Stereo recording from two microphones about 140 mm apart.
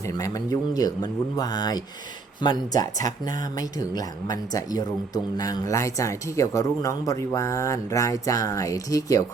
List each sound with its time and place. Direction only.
0.0 s speech: 25° left (ahead or behind)